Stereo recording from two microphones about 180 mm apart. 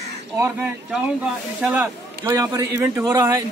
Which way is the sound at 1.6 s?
10° right (ahead or behind).